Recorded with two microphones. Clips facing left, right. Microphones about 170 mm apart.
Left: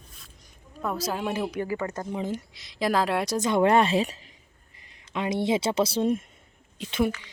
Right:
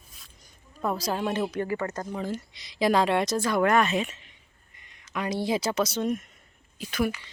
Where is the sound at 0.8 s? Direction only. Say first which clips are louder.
Right 1 dB; centre (ahead or behind); by 2.4 s 20° left (ahead or behind).